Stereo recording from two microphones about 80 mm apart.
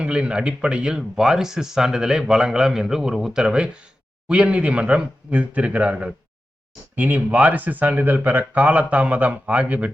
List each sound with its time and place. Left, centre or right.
0.0 s speech: centre